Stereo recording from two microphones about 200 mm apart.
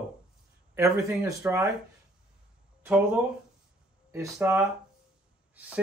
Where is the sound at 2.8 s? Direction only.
10° right (ahead or behind).